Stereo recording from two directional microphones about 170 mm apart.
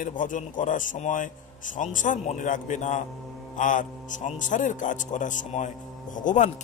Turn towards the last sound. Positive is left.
turn(degrees=50)  # may be behind; listen again after turning